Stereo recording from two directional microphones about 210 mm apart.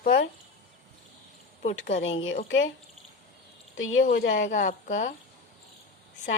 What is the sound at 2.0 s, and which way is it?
Speech, 65° left (ahead or behind).